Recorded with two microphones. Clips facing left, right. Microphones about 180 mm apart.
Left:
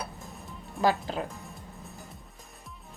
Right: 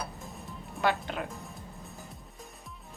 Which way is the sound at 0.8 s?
35° left (ahead or behind).